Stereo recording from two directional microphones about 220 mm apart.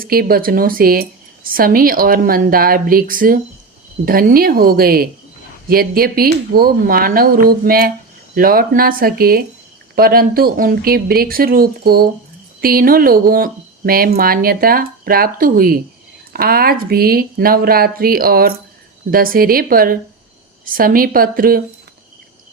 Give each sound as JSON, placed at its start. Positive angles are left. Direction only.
{"t": 0.0, "sound": "speech", "side_deg": -45}